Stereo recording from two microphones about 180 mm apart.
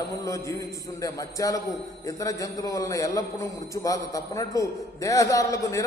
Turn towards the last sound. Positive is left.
turn(degrees=15)  # may be behind; listen again after turning